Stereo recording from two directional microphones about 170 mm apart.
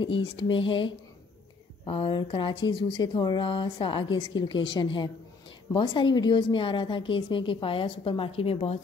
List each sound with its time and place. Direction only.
0.0 s speech: 30° left (ahead or behind)